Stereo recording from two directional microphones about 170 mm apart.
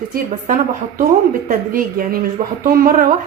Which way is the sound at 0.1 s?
50° right (ahead or behind).